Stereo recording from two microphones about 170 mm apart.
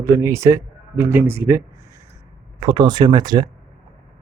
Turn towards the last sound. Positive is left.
turn(degrees=-25)  # may be behind; listen again after turning